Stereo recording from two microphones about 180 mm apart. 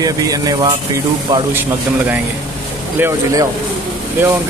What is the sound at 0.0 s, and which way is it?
Speech, 20° right (ahead or behind).